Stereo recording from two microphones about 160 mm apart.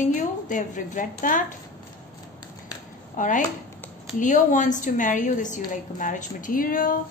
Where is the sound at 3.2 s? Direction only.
55° left (ahead or behind).